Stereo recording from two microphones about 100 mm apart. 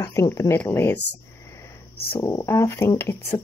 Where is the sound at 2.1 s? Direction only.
30° left (ahead or behind).